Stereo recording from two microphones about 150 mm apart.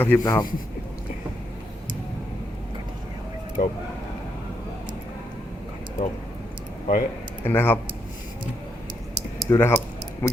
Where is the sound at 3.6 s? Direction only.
65° left (ahead or behind).